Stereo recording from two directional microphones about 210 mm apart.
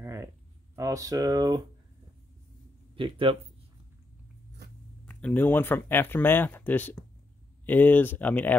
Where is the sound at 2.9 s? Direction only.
25° right (ahead or behind).